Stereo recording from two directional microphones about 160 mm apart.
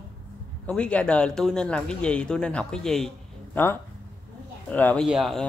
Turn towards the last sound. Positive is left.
turn(degrees=0)  # may be behind; listen again after turning